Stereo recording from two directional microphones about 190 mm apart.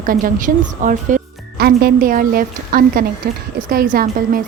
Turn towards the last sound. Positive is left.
turn(degrees=-50)  # may be behind; listen again after turning